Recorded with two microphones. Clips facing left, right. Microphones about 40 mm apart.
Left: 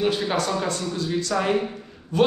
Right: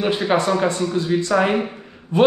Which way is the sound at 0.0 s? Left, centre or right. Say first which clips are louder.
Right 4 dB; right.